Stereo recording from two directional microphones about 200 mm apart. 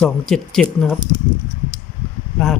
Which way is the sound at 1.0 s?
20° right (ahead or behind).